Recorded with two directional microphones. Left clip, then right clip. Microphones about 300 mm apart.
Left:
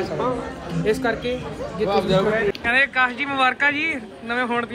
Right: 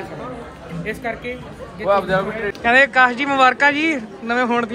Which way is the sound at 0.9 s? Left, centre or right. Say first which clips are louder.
Left 4 dB; centre.